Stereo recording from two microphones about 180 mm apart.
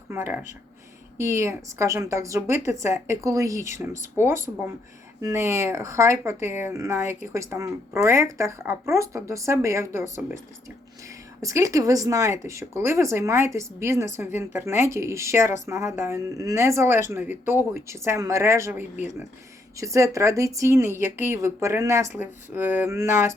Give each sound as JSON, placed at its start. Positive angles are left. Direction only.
{"t": 0.1, "sound": "a woman's voice", "side_deg": -15}
{"t": 11.4, "sound": "a woman's voice", "side_deg": -20}